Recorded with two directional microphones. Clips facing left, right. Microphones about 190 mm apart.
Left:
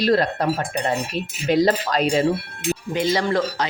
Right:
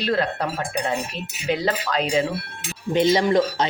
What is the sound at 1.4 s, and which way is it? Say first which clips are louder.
Speech: left 5 dB; 40° left (ahead or behind).